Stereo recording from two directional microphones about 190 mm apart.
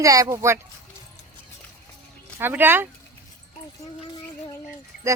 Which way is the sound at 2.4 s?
10° right (ahead or behind).